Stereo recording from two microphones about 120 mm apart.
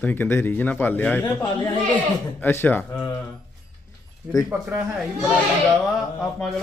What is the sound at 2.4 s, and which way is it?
Speech, 15° left (ahead or behind).